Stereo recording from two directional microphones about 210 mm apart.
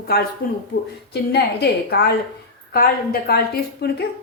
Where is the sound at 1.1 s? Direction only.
50° left (ahead or behind).